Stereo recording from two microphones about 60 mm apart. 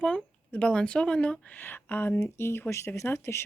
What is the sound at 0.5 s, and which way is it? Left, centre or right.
A woman's voice, centre.